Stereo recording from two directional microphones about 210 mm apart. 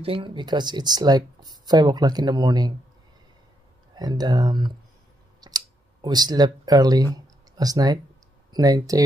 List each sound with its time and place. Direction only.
0.0 s speech: 25° right (ahead or behind)
3.9 s speech: 20° right (ahead or behind)
5.4 s a sound: 20° right (ahead or behind)
7.5 s speech: 15° right (ahead or behind)